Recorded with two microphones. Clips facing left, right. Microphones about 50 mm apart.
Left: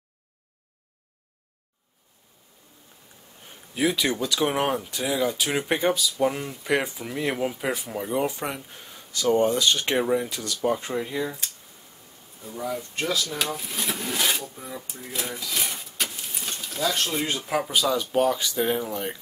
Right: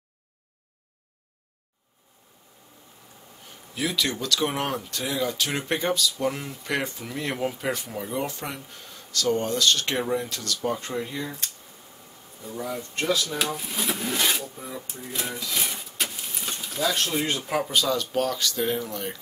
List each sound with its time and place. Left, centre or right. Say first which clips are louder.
3.7 s speech: left 3 dB; centre